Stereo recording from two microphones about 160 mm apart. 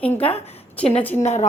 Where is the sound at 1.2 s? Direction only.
45° left (ahead or behind).